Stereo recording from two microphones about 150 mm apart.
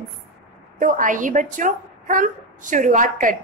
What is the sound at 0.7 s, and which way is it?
A woman's voice, 60° right (ahead or behind).